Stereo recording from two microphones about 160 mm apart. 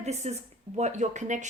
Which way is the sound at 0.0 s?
45° right (ahead or behind).